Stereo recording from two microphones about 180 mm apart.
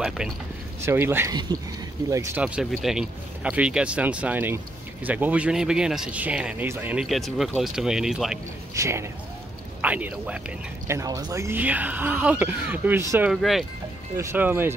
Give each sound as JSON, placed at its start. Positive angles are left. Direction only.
{"t": 0.7, "sound": "speech", "side_deg": -15}
{"t": 8.7, "sound": "speech", "side_deg": -15}
{"t": 10.9, "sound": "speech", "side_deg": -20}
{"t": 13.3, "sound": "speech", "side_deg": 0}
{"t": 14.1, "sound": "speech", "side_deg": -15}